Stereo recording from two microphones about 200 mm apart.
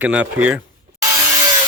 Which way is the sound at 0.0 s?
10° right (ahead or behind).